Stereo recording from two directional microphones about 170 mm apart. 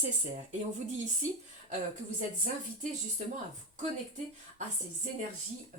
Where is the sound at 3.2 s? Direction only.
45° right (ahead or behind).